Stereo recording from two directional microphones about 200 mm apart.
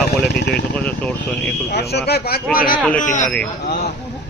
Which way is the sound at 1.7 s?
55° left (ahead or behind).